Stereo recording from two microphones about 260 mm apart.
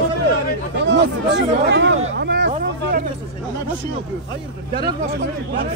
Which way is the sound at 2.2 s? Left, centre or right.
Right.